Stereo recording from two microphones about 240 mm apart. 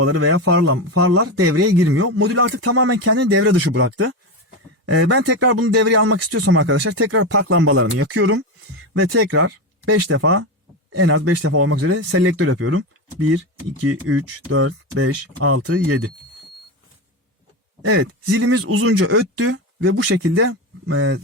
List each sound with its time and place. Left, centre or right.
0.0 s speech: right
17.8 s speech: right